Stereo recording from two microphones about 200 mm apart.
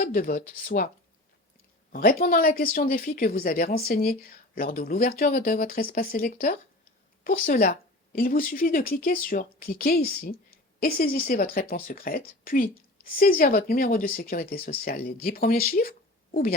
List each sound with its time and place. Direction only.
0.0 s speech: 45° left (ahead or behind)
1.9 s speech: 45° left (ahead or behind)